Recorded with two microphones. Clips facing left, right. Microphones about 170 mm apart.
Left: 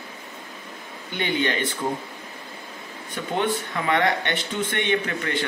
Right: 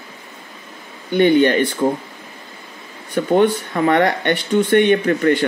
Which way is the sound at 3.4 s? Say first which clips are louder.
Right 8 dB; 45° right (ahead or behind).